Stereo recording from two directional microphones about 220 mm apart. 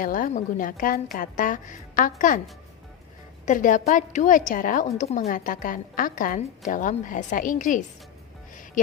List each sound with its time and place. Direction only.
0.0 s a woman's voice: 40° left (ahead or behind)
3.4 s a woman's voice: 35° left (ahead or behind)